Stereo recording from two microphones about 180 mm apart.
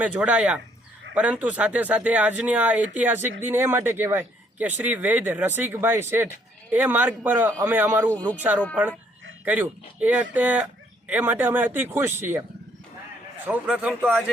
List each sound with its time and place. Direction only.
0.0 s speech: 5° right (ahead or behind)
8.1 s speech: 10° left (ahead or behind)
8.4 s speech: 10° right (ahead or behind)
13.5 s speech: 5° right (ahead or behind)